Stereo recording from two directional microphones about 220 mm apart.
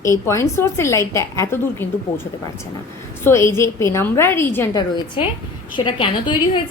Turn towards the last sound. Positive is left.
turn(degrees=20)  # may be behind; listen again after turning